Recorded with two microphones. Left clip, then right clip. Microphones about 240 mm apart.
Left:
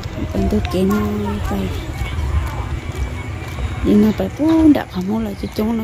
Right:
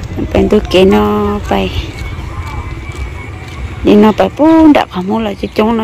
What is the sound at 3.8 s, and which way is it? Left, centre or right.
Speech, centre.